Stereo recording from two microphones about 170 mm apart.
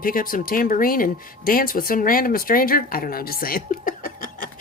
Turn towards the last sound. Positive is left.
turn(degrees=50)  # may be behind; listen again after turning